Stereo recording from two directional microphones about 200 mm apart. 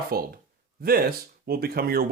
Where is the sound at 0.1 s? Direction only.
50° right (ahead or behind).